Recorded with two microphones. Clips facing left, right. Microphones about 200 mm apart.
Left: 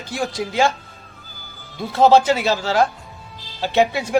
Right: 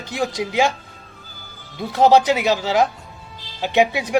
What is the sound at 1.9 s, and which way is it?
A man's voice, 15° right (ahead or behind).